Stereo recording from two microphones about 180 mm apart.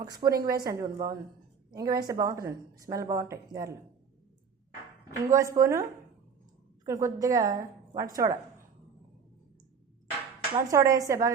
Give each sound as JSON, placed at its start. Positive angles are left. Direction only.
{"t": 0.0, "sound": "a woman's voice", "side_deg": -20}
{"t": 5.3, "sound": "a woman's voice", "side_deg": -15}
{"t": 6.8, "sound": "speech", "side_deg": -15}
{"t": 10.5, "sound": "speech", "side_deg": -20}